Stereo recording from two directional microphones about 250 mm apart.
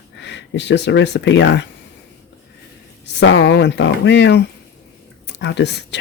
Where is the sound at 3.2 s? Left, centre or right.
Left.